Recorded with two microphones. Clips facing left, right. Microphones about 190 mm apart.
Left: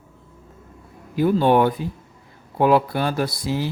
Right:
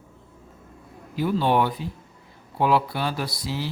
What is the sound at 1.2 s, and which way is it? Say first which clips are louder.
Speech: left 5 dB; 50° left (ahead or behind).